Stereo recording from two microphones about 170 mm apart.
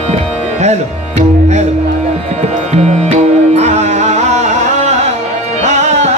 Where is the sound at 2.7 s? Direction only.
40° right (ahead or behind).